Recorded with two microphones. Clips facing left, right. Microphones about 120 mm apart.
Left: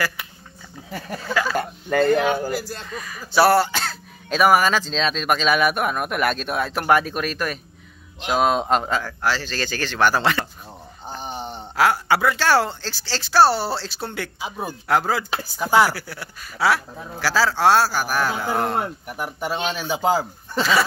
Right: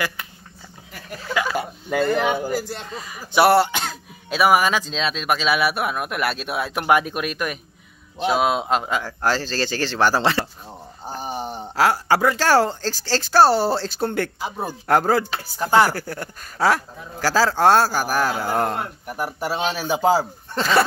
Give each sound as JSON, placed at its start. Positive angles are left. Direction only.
{"t": 1.3, "sound": "speech", "side_deg": -15}
{"t": 2.6, "sound": "speech", "side_deg": -20}
{"t": 9.2, "sound": "speech", "side_deg": -40}
{"t": 11.1, "sound": "wail", "side_deg": -10}
{"t": 11.7, "sound": "speech", "side_deg": -35}
{"t": 15.6, "sound": "speech", "side_deg": 5}
{"t": 15.9, "sound": "speech", "side_deg": -50}
{"t": 19.0, "sound": "speech", "side_deg": -5}